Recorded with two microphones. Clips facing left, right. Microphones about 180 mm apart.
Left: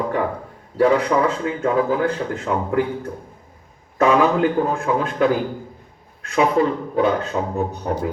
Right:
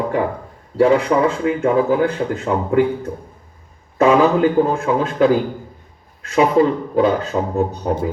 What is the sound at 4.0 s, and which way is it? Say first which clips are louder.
Speech: right 3 dB; 25° right (ahead or behind).